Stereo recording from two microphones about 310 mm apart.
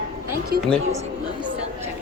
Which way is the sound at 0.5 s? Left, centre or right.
Right.